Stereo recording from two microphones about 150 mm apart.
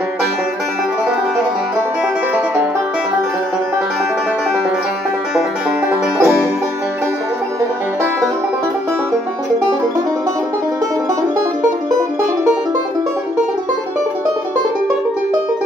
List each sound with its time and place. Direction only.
5.9 s music: 10° right (ahead or behind)